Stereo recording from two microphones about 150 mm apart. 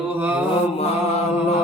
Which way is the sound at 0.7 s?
45° left (ahead or behind).